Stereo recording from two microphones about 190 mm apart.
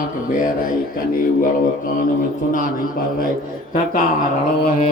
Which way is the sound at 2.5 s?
45° left (ahead or behind).